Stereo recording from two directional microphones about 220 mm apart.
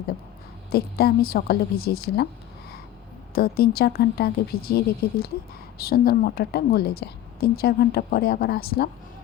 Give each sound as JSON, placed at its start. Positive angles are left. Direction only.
{"t": 0.7, "sound": "a woman's voice", "side_deg": 45}
{"t": 3.3, "sound": "a woman's voice", "side_deg": 45}